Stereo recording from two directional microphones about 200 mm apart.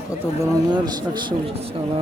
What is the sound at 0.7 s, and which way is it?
Speech, 20° right (ahead or behind).